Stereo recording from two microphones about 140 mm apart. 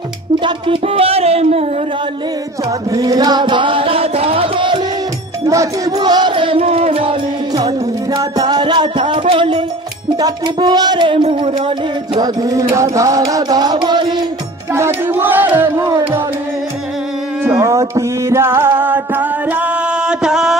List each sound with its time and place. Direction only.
0.4 s a sound: 40° right (ahead or behind)
2.9 s music: 25° right (ahead or behind)
10.1 s speech: 30° right (ahead or behind)
14.7 s music: 20° right (ahead or behind)
17.4 s music: 20° right (ahead or behind)